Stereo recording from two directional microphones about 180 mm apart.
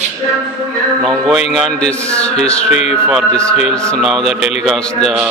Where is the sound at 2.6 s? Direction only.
40° left (ahead or behind).